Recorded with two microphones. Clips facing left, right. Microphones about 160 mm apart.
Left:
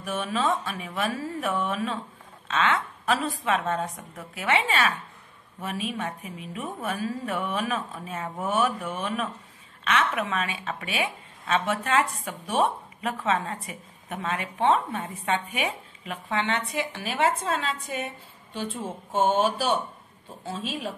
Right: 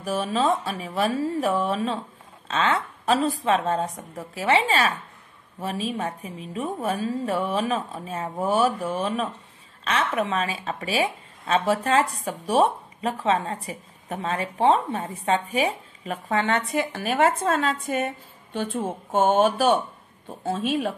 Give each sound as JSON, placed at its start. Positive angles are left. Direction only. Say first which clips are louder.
{"t": 0.0, "sound": "speech", "louder": "right 4 dB", "side_deg": -35}